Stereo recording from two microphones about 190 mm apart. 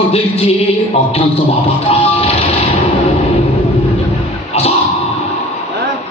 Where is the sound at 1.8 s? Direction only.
30° left (ahead or behind).